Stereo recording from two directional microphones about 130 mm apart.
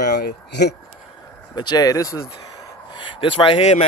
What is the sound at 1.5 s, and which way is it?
Speech, 35° left (ahead or behind).